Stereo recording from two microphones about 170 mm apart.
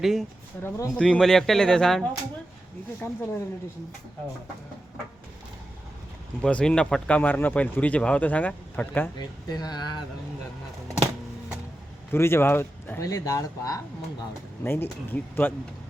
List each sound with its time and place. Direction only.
0.0 s speech: centre (ahead or behind)
3.0 s speech: 15° left (ahead or behind)
6.4 s speech: 5° left (ahead or behind)
9.1 s speech: 25° left (ahead or behind)
12.1 s speech: 15° left (ahead or behind)